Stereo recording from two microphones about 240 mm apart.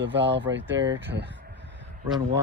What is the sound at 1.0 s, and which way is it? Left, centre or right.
Speech, right.